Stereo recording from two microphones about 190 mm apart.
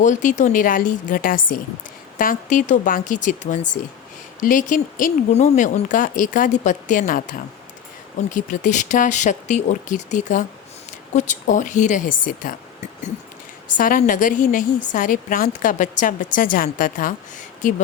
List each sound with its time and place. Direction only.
0.0 s a woman's voice: 40° left (ahead or behind)